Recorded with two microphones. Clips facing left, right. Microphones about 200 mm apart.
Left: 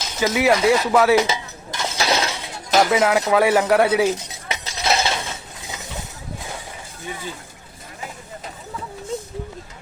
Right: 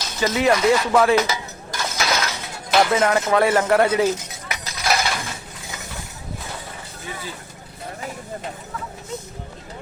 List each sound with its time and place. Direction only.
0.2 s speech: 5° left (ahead or behind)
1.3 s dishes: 25° left (ahead or behind); by 2.9 s 40° left (ahead or behind)
2.9 s speech: 5° left (ahead or behind)
4.4 s a sound: 25° left (ahead or behind)